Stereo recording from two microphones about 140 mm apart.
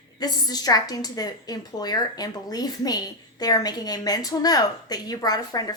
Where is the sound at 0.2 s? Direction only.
30° left (ahead or behind).